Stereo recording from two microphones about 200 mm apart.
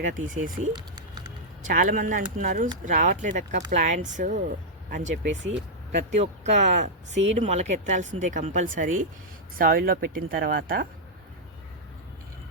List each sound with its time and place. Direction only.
0.1 s speech: 40° right (ahead or behind)
0.7 s typing: 20° right (ahead or behind)
1.6 s speech: 40° right (ahead or behind)
5.0 s speech: 65° right (ahead or behind)
5.9 s speech: 35° right (ahead or behind)